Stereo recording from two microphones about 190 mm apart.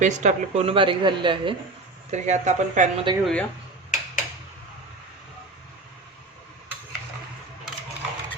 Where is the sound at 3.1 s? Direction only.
25° right (ahead or behind).